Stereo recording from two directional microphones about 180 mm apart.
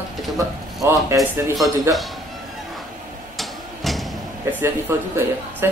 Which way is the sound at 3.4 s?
Centre (ahead or behind).